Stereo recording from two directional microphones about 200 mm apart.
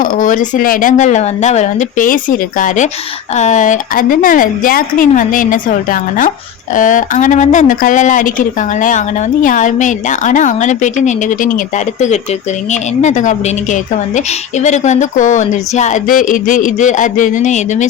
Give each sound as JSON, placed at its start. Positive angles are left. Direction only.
{"t": 0.0, "sound": "speech", "side_deg": 40}